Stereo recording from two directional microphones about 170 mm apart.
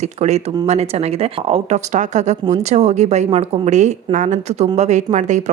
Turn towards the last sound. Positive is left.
turn(degrees=-45)  # may be behind; listen again after turning